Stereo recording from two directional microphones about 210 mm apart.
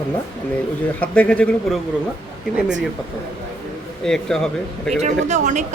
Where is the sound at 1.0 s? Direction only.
5° left (ahead or behind).